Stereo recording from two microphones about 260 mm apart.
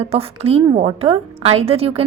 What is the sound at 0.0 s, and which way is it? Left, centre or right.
A woman's voice, right.